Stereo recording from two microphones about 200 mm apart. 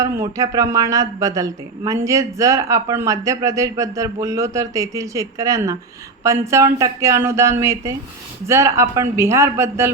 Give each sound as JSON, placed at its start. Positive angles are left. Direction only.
{"t": 0.2, "sound": "a woman's voice", "side_deg": -15}